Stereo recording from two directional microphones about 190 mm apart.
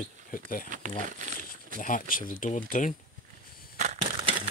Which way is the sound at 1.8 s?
45° left (ahead or behind).